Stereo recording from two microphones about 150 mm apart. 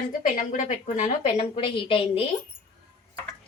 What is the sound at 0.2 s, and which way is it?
A woman's voice, 60° left (ahead or behind).